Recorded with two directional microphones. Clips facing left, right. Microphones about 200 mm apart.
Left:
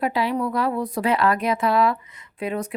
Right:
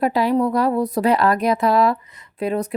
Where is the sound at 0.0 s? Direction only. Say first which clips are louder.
Right 5 dB; 40° right (ahead or behind).